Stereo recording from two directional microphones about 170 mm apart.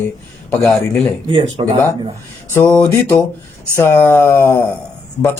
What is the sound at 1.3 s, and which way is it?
Speech, 35° right (ahead or behind).